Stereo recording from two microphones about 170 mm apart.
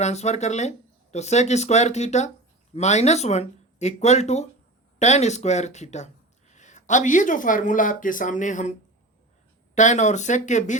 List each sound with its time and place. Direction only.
0.0 s speech: 40° left (ahead or behind)
9.7 s speech: 45° left (ahead or behind)